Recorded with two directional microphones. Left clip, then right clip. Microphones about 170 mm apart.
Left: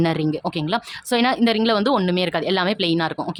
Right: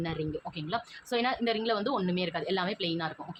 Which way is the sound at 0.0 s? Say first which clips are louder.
Left 13 dB; 80° left.